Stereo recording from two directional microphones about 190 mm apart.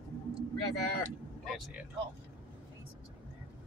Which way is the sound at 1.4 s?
Centre (ahead or behind).